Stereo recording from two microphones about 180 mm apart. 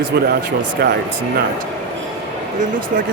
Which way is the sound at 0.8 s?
60° right (ahead or behind).